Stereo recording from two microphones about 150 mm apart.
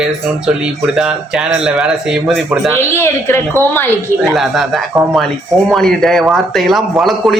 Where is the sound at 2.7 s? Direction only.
15° left (ahead or behind).